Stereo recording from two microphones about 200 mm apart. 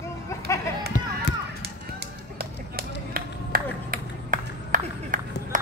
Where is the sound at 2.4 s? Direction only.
50° right (ahead or behind).